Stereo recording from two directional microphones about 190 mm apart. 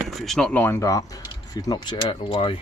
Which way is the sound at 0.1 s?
Centre (ahead or behind).